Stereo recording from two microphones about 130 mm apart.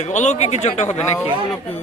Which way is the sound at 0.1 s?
65° left (ahead or behind).